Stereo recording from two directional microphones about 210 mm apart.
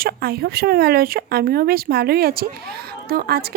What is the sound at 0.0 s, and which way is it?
Speech, 45° right (ahead or behind).